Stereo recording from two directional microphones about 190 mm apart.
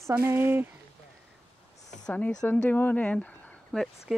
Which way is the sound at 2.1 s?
5° left (ahead or behind).